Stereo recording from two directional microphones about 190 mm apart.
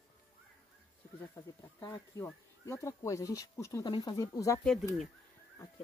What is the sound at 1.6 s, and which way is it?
Speech, 20° left (ahead or behind).